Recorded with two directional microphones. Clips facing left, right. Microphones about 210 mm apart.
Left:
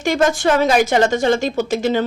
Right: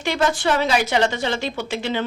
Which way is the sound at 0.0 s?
45° left (ahead or behind).